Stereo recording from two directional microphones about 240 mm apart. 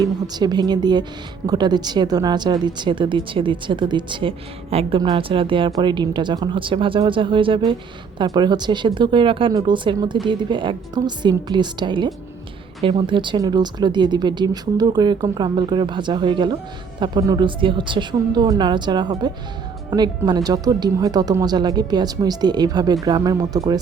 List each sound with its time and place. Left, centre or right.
0.0 s speech: centre